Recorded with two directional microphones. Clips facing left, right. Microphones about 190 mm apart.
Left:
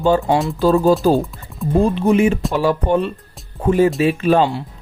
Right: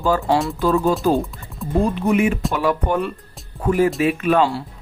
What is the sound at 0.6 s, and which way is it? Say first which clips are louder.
Speech: left 7 dB; 35° left (ahead or behind).